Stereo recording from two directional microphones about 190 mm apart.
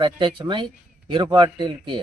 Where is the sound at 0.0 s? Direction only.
25° right (ahead or behind).